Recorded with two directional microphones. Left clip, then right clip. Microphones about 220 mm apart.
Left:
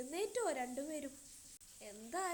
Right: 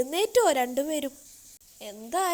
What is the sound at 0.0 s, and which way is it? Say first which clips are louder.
A woman's voice: right 17 dB; 40° right (ahead or behind).